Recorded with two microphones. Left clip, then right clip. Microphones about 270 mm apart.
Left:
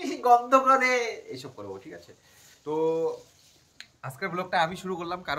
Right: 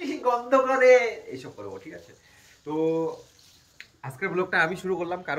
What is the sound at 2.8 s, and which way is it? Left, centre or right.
Speech, centre.